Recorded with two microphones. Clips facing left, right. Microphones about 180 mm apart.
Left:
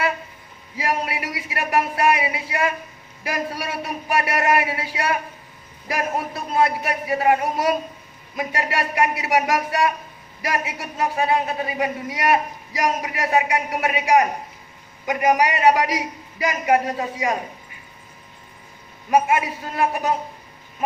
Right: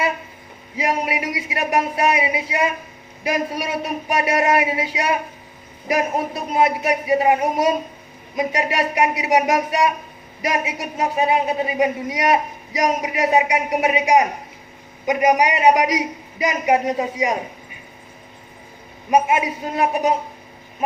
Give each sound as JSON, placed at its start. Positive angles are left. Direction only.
{"t": 0.8, "sound": "a man's voice", "side_deg": -20}
{"t": 19.1, "sound": "a man's voice", "side_deg": -20}